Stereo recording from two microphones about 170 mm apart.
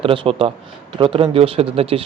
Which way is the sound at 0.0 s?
30° right (ahead or behind).